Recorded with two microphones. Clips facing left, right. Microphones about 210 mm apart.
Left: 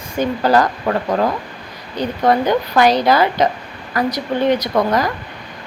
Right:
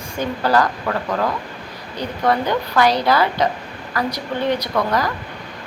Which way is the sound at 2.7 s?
15° left (ahead or behind).